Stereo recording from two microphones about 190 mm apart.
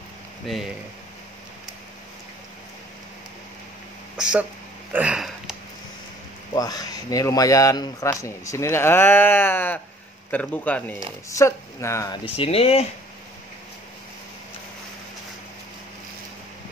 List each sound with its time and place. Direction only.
0.5 s speech: centre (ahead or behind)
4.2 s speech: 5° right (ahead or behind)
4.9 s a sound: 5° right (ahead or behind)
6.5 s speech: 20° left (ahead or behind)
12.3 s speech: 30° left (ahead or behind)